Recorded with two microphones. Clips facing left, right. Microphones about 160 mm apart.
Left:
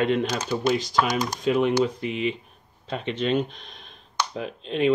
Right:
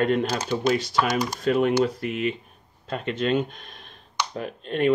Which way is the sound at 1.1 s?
Centre (ahead or behind).